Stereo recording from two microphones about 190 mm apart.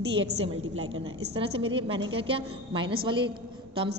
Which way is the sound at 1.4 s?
30° right (ahead or behind).